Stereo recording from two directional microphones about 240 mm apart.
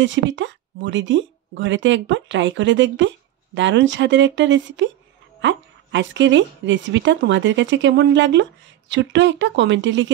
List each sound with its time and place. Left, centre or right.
0.0 s a woman's voice: right